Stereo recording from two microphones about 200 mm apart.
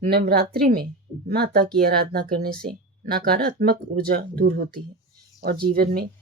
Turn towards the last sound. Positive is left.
turn(degrees=-50)  # may be behind; listen again after turning